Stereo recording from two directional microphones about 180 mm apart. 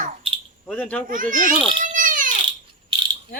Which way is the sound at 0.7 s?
10° left (ahead or behind).